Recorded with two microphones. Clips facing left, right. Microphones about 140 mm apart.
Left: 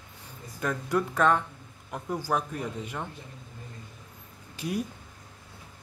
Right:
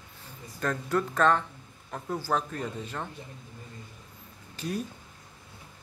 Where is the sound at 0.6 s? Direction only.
10° left (ahead or behind).